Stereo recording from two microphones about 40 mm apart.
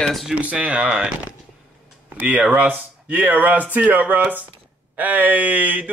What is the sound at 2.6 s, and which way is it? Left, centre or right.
Speech, right.